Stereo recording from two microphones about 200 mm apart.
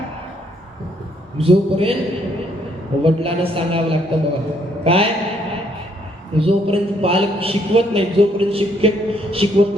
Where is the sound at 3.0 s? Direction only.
30° right (ahead or behind).